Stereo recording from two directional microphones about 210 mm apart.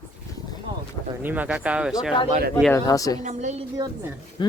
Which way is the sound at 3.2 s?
35° right (ahead or behind).